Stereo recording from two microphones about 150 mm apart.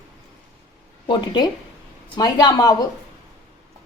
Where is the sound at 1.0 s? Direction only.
30° left (ahead or behind).